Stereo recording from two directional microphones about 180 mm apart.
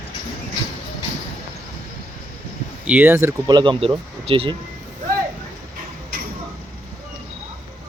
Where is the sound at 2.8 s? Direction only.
10° right (ahead or behind); by 4.5 s 30° right (ahead or behind).